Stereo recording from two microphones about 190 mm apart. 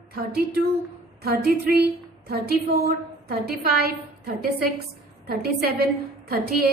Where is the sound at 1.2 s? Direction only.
55° right (ahead or behind).